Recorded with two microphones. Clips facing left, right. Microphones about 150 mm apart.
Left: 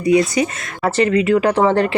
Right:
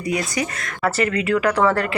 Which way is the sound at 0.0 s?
25° left (ahead or behind).